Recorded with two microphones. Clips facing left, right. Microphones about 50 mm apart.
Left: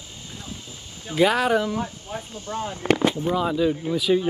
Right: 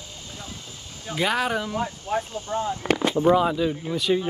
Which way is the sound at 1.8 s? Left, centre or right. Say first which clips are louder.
Right 4 dB; right.